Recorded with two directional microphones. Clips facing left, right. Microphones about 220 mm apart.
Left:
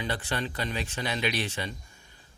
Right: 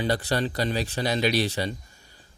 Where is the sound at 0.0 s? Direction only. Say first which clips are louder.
Right 7 dB; 40° right (ahead or behind).